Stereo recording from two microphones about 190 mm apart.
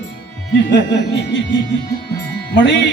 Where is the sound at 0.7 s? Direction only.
65° left (ahead or behind).